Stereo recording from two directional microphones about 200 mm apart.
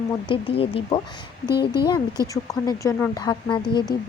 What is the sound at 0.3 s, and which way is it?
Speech, 30° left (ahead or behind).